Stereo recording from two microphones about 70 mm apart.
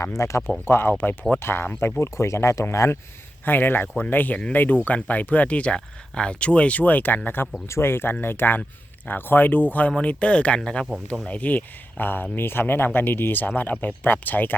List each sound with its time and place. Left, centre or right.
0.0 s speech: left
0.6 s speech: left
3.4 s speech: left